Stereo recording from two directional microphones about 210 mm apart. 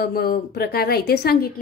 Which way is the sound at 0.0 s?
45° left (ahead or behind).